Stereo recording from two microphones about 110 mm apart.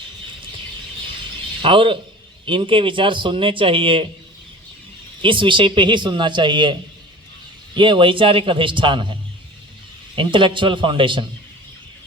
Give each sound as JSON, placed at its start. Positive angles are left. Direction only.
{"t": 1.6, "sound": "a man's voice", "side_deg": -50}
{"t": 5.2, "sound": "a man's voice", "side_deg": -50}
{"t": 10.2, "sound": "a man's voice", "side_deg": -50}